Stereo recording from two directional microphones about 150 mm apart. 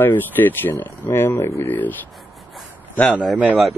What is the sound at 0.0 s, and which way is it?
Speech, 15° left (ahead or behind).